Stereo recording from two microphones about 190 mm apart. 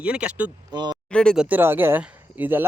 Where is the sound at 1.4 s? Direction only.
10° right (ahead or behind).